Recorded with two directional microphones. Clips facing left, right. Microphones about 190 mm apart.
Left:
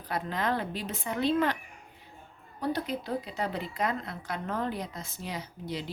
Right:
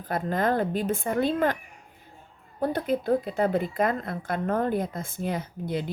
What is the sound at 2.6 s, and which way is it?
Speech, 50° right (ahead or behind).